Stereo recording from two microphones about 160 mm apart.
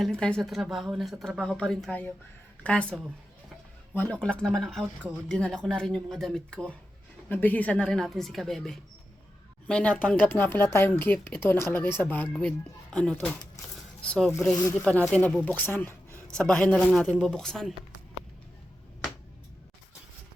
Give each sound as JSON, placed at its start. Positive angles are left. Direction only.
{"t": 0.0, "sound": "speech", "side_deg": 5}
{"t": 3.9, "sound": "speech", "side_deg": 10}
{"t": 13.6, "sound": "speech", "side_deg": 20}
{"t": 14.0, "sound": "speech", "side_deg": 5}